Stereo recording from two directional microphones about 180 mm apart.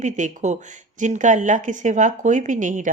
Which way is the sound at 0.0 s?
40° right (ahead or behind).